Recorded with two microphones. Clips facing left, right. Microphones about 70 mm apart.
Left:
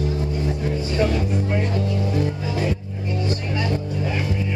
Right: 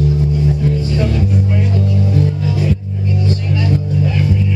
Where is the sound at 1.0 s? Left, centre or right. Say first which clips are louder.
Right 3 dB; centre.